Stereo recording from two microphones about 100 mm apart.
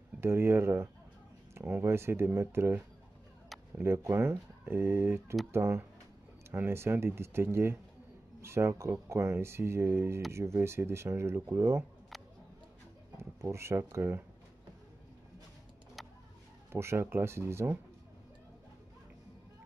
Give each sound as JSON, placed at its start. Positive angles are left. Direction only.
{"t": 0.2, "sound": "speech", "side_deg": -25}
{"t": 3.8, "sound": "speech", "side_deg": -25}
{"t": 13.2, "sound": "speech", "side_deg": -30}
{"t": 16.0, "sound": "vehicle", "side_deg": 0}
{"t": 16.7, "sound": "speech", "side_deg": -25}